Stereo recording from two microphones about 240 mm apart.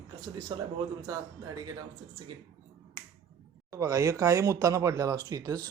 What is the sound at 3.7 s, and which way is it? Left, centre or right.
Speech, centre.